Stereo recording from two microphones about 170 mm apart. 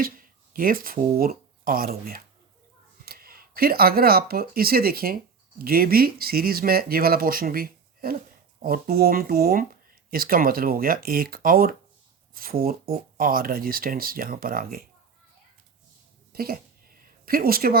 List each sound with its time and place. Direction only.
0.0 s speech: 55° right (ahead or behind)
16.3 s speech: 65° right (ahead or behind)